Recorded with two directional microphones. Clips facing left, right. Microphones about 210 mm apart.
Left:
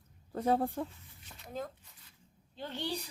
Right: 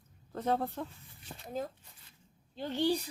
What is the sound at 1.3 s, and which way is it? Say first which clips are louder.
Speech: right 3 dB; 25° right (ahead or behind).